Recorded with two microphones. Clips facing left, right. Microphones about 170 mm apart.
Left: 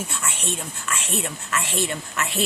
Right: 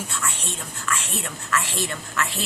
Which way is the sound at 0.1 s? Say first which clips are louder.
Left 1 dB; 20° left (ahead or behind).